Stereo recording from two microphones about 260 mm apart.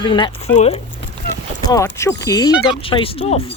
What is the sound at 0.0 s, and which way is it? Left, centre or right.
Speech, centre.